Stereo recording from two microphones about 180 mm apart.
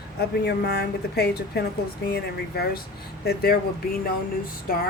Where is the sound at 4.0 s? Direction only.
55° left (ahead or behind).